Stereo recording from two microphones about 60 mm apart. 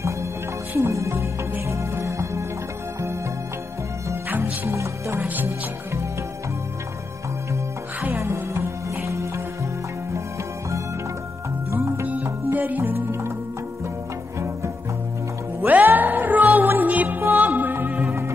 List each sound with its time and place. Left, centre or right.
0.7 s music: right
4.6 s music: right
5.2 s music: right
8.2 s music: right
11.7 s music: right
12.5 s music: right
15.6 s music: right